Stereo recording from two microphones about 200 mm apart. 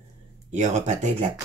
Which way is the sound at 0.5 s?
35° right (ahead or behind).